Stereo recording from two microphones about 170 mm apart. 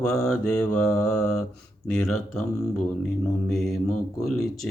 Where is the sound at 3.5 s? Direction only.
Centre (ahead or behind).